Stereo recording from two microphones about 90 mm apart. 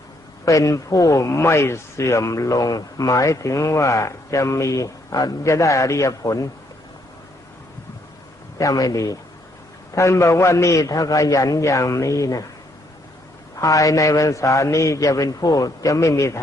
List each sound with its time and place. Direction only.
0.4 s a man's voice: 35° left (ahead or behind)
8.5 s a man's voice: 40° left (ahead or behind)
13.6 s a man's voice: 40° left (ahead or behind)